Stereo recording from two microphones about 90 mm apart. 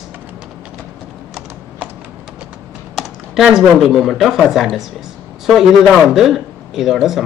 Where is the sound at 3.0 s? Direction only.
5° right (ahead or behind).